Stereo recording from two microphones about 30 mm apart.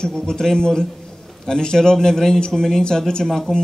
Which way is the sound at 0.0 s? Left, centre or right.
Centre.